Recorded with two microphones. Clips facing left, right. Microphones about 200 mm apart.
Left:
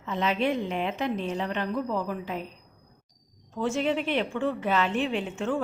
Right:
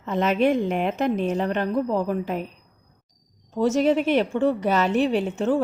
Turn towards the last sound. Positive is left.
turn(degrees=-40)  # may be behind; listen again after turning